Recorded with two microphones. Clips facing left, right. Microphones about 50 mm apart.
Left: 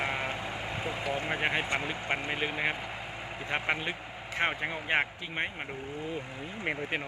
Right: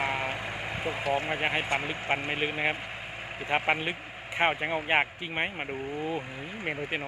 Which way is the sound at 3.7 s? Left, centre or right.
Centre.